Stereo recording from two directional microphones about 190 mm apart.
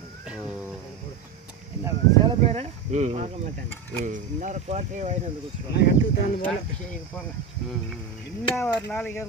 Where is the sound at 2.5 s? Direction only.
35° right (ahead or behind).